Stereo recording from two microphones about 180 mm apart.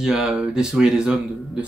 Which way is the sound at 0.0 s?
5° right (ahead or behind).